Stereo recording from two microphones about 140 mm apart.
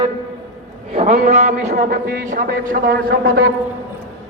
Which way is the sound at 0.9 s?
50° right (ahead or behind).